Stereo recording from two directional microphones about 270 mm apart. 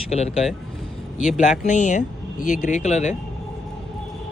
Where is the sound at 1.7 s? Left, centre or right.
Left.